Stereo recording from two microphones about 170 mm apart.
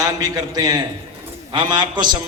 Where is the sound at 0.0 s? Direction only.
20° right (ahead or behind).